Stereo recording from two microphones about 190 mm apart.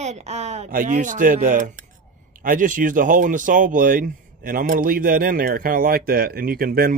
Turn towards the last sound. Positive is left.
turn(degrees=-50)  # may be behind; listen again after turning